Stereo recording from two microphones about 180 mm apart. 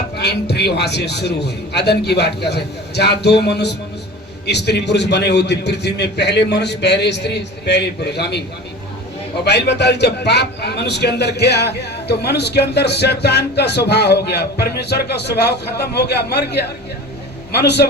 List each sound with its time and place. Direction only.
0.2 s a man's voice: 65° left (ahead or behind)
9.4 s a man's voice: 70° left (ahead or behind)